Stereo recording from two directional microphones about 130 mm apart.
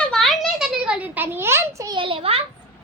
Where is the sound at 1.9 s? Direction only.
40° right (ahead or behind).